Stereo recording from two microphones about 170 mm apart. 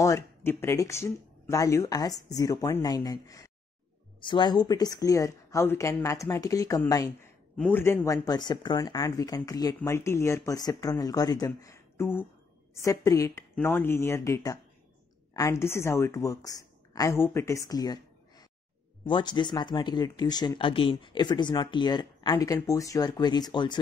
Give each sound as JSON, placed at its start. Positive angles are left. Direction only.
{"t": 0.0, "sound": "a woman's voice", "side_deg": 15}